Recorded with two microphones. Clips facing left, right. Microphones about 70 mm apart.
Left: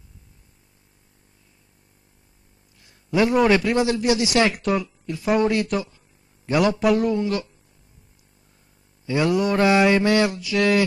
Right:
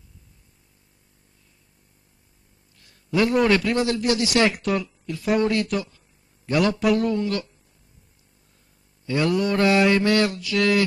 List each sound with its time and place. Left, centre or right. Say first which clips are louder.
2.8 s a sound: left 1 dB; centre
3.4 s mantra: left 2 dB; centre
4.3 s speech: left 1 dB; centre
5.4 s a man's voice: left 1 dB; centre
9.0 s mantra: left 1 dB; centre